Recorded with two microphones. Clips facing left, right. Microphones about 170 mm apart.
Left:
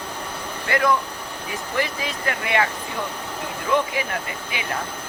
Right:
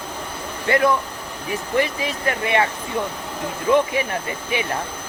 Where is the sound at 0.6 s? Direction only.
25° right (ahead or behind).